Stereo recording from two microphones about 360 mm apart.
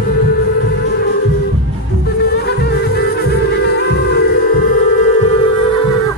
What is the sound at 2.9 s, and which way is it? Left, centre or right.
Music, left.